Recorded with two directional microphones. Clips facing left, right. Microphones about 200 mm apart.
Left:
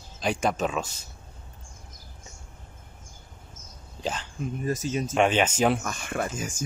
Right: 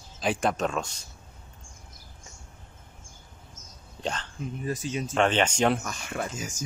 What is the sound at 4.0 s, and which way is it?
Speech, 5° left (ahead or behind).